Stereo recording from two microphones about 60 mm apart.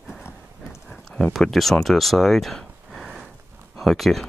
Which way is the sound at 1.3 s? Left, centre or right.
Centre.